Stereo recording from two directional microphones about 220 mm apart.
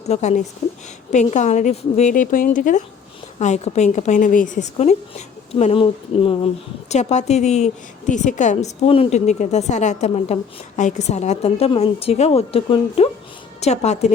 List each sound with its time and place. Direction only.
0.0 s a woman's voice: 30° left (ahead or behind)